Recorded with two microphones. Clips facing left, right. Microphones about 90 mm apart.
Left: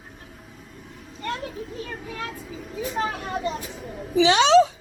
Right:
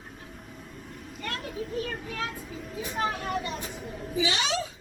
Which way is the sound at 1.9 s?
10° left (ahead or behind).